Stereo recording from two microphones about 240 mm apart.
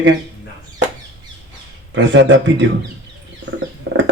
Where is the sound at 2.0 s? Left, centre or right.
Right.